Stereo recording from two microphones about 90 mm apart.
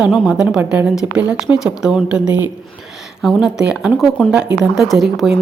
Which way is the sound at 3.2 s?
5° right (ahead or behind).